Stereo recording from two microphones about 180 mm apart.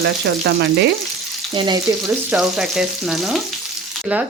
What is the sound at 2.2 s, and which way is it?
Frying, 5° right (ahead or behind).